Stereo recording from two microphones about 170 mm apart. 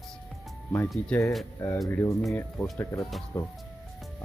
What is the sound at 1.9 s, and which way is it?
Speech, 15° left (ahead or behind).